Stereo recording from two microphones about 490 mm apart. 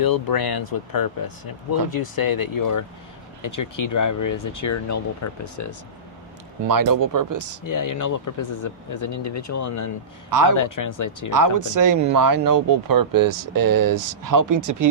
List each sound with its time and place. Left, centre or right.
0.0 s speech: left
6.7 s speech: right
7.7 s speech: left
11.3 s speech: right